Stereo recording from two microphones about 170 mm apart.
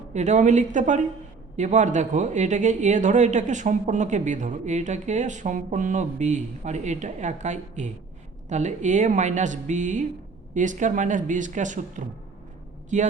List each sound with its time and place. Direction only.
0.1 s speech: 45° right (ahead or behind)